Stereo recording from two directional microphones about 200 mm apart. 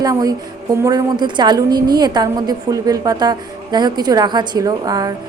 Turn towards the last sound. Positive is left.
turn(degrees=-20)  # may be behind; listen again after turning